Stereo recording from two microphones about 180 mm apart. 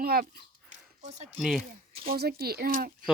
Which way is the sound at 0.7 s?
40° right (ahead or behind).